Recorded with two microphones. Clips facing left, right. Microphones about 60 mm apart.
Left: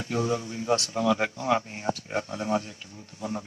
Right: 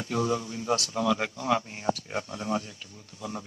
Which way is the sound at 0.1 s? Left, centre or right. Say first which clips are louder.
Even; left.